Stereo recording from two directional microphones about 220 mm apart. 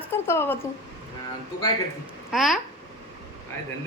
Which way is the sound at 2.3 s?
Centre (ahead or behind).